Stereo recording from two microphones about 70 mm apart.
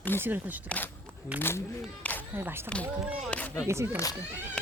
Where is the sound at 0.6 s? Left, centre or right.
Left.